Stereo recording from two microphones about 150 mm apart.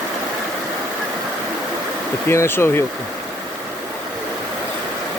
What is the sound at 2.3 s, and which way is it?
Speech, 15° left (ahead or behind).